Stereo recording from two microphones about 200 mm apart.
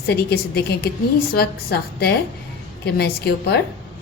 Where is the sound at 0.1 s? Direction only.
55° left (ahead or behind).